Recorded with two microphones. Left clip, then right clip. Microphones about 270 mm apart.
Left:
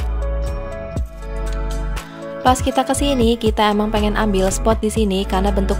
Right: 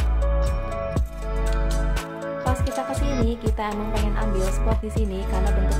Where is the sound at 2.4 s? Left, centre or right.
Left.